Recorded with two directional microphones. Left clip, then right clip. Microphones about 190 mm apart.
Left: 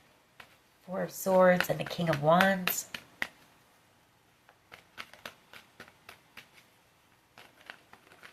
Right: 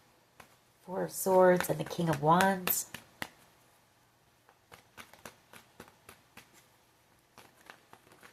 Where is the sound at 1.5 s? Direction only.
25° right (ahead or behind).